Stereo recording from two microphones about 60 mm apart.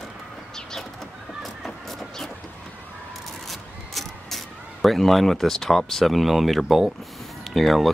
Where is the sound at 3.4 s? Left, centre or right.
Centre.